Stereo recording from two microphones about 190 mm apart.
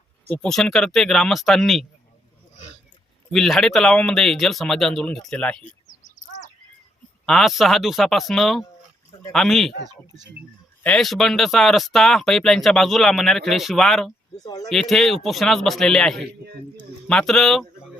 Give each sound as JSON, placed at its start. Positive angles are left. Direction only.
{"t": 0.3, "sound": "speech", "side_deg": 5}
{"t": 3.3, "sound": "speech", "side_deg": 0}
{"t": 7.3, "sound": "speech", "side_deg": 0}
{"t": 10.8, "sound": "speech", "side_deg": 0}
{"t": 14.3, "sound": "speech", "side_deg": 20}
{"t": 14.7, "sound": "speech", "side_deg": 0}